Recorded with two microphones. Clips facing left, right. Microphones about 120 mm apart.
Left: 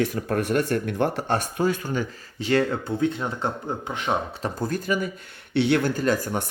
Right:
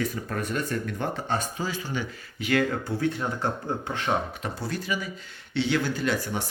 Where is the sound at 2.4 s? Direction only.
30° left (ahead or behind).